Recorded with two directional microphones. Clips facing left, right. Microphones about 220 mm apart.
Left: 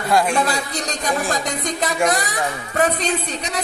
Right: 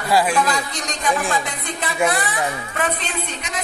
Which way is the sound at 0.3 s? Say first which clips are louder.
Even; 35° left (ahead or behind).